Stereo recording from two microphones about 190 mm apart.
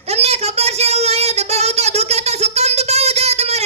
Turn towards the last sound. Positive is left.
turn(degrees=-35)  # may be behind; listen again after turning